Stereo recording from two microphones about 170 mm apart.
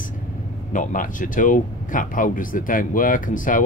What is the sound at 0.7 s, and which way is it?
Speech, 50° left (ahead or behind).